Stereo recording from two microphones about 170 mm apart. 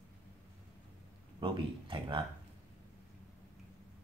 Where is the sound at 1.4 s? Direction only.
30° right (ahead or behind).